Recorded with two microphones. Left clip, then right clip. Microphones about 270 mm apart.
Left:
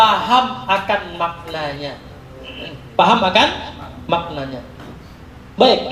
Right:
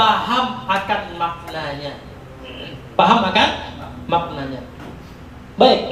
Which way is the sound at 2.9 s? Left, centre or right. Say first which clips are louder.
Left 1 dB; left.